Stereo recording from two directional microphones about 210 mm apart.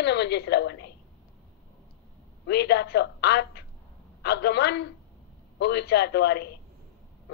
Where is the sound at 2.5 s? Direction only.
55° left (ahead or behind).